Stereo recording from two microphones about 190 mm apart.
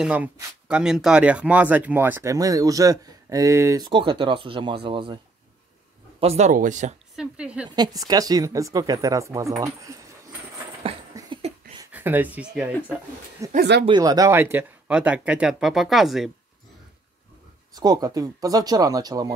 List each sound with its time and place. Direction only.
0.0 s speech: 5° right (ahead or behind); by 7.0 s 40° right (ahead or behind)
7.2 s speech: 5° right (ahead or behind)
7.7 s speech: 20° right (ahead or behind)
10.8 s dog: 30° right (ahead or behind)
11.8 s speech: 10° right (ahead or behind)
13.6 s speech: 60° right (ahead or behind)
13.8 s speech: 20° right (ahead or behind); by 16.3 s centre (ahead or behind)
17.7 s speech: 20° right (ahead or behind)